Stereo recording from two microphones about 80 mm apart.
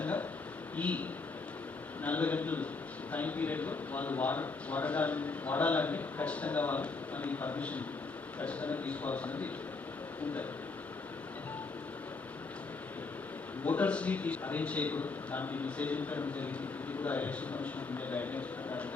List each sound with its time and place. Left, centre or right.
0.0 s a sound: centre
0.8 s a man's voice: centre
2.0 s a man's voice: centre
13.7 s a man's voice: centre